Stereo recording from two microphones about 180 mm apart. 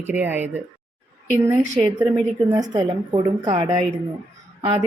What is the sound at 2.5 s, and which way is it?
A woman's voice, 25° right (ahead or behind).